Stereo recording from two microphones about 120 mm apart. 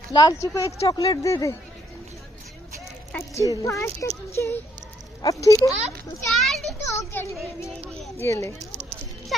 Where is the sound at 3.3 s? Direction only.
25° left (ahead or behind).